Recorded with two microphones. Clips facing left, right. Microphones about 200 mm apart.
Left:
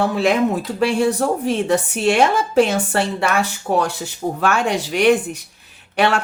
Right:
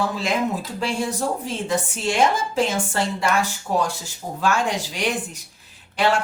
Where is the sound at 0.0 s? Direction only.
65° left (ahead or behind).